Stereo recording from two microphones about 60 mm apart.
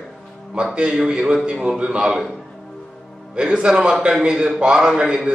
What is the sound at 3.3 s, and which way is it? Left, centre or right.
A man's voice, centre.